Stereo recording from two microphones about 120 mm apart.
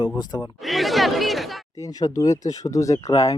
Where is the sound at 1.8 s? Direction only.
30° left (ahead or behind).